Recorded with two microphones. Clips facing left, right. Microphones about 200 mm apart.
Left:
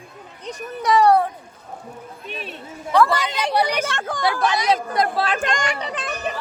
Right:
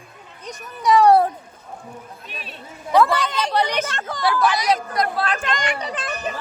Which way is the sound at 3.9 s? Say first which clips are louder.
Left 2 dB; 50° left (ahead or behind).